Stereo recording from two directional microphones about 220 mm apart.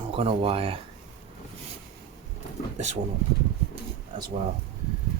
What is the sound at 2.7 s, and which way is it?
Speech, 30° right (ahead or behind).